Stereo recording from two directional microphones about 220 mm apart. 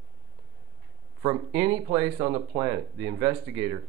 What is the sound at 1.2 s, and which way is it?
Speech, 10° right (ahead or behind).